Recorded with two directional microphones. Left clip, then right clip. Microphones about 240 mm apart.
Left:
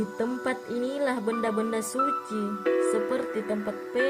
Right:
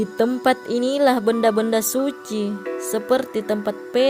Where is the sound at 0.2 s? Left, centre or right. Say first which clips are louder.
Right 12 dB; right.